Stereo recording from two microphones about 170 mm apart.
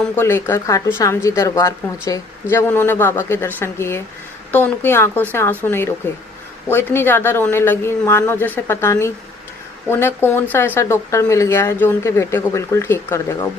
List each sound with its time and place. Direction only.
0.0 s a woman's voice: 15° left (ahead or behind)